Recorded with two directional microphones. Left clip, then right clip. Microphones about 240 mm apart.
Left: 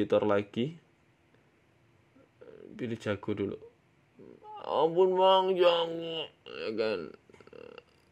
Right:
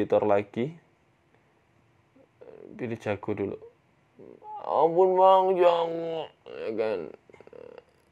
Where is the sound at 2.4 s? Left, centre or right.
Left.